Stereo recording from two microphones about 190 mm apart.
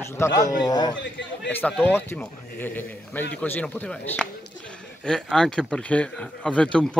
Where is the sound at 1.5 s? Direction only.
5° left (ahead or behind).